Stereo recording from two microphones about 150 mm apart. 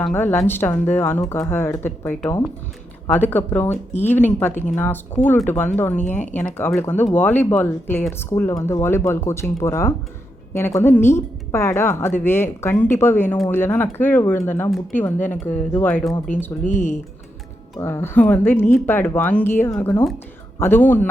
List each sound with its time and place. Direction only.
0.0 s a woman's voice: 15° left (ahead or behind)
17.7 s a woman's voice: 15° left (ahead or behind)